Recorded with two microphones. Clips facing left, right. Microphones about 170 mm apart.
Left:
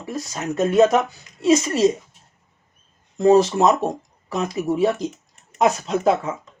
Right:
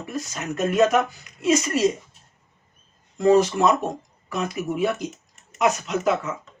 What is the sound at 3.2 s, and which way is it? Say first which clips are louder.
Speech: left 3 dB; 25° left (ahead or behind).